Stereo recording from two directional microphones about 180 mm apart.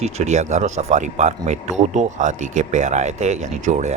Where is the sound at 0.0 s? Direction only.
40° right (ahead or behind).